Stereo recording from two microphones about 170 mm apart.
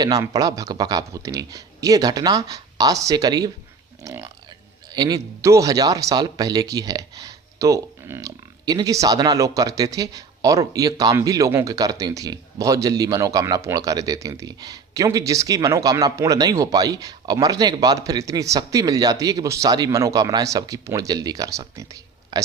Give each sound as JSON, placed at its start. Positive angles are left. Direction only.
{"t": 0.0, "sound": "speech", "side_deg": -20}